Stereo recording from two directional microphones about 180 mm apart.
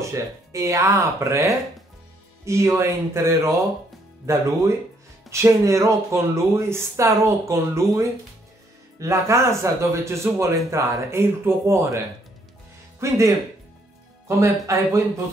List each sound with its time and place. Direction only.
0.0 s speech: 15° right (ahead or behind)
13.0 s speech: 15° right (ahead or behind)
14.2 s speech: 15° right (ahead or behind)